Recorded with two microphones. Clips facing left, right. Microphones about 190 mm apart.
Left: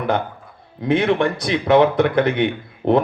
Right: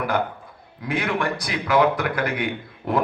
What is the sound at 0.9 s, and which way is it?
A man's voice, 25° left (ahead or behind).